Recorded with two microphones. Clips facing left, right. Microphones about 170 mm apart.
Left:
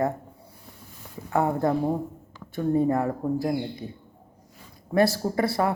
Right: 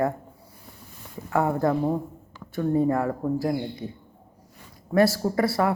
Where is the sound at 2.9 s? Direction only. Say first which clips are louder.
Even; 20° left (ahead or behind).